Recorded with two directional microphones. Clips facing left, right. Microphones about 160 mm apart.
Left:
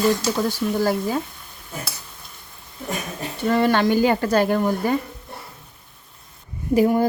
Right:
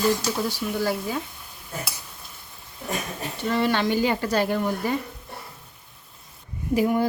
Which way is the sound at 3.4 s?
50° left (ahead or behind).